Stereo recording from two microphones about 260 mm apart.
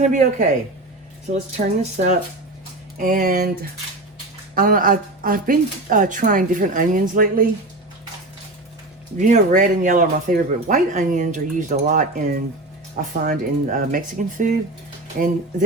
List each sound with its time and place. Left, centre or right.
0.0 s speech: right
4.5 s speech: right
9.1 s speech: right